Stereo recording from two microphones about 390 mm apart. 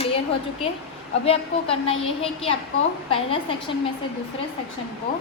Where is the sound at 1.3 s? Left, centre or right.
Centre.